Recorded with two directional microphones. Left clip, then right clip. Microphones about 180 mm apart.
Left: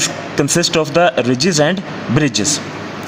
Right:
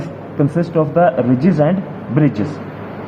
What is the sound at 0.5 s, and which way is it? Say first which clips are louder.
Speech: left 2 dB; 65° left (ahead or behind).